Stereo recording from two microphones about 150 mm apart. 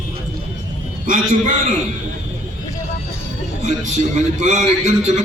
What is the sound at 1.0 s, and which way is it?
Speech, 60° right (ahead or behind).